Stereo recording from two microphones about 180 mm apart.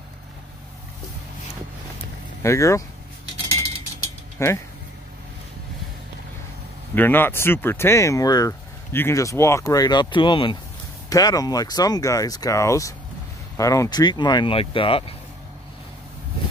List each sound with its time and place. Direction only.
2.4 s speech: 15° left (ahead or behind)
4.4 s speech: 15° left (ahead or behind)
7.0 s speech: 10° left (ahead or behind); by 15.1 s 30° left (ahead or behind)